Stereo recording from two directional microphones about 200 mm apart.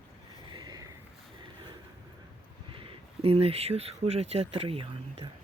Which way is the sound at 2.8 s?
25° right (ahead or behind).